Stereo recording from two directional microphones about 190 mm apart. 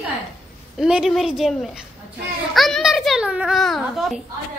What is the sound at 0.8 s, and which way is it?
A child's voice, 5° right (ahead or behind).